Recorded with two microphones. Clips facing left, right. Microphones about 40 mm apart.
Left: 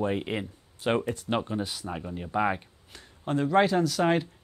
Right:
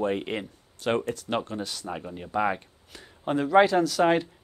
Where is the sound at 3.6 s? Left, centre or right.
Centre.